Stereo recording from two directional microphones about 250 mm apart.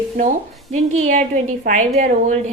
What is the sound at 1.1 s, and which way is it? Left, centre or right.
A woman's voice, right.